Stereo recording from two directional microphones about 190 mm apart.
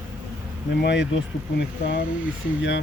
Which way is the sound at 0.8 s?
65° left (ahead or behind).